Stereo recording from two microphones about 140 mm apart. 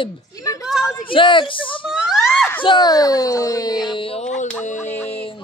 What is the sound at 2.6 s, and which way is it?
Speech, 30° left (ahead or behind).